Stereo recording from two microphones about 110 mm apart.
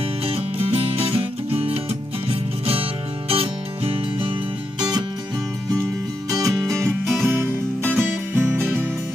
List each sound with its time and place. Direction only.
0.2 s music: 60° right (ahead or behind)
6.3 s music: 30° right (ahead or behind)
7.1 s music: 20° right (ahead or behind)